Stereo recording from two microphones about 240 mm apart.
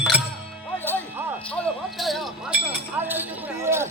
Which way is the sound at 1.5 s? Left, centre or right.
Centre.